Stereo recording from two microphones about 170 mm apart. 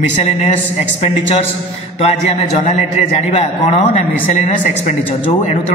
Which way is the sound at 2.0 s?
40° left (ahead or behind).